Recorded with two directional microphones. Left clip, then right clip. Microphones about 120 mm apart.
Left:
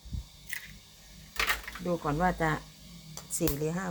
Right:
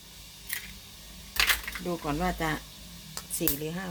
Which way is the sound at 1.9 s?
5° right (ahead or behind).